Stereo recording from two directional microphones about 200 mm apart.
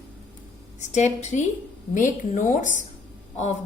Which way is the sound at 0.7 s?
35° left (ahead or behind).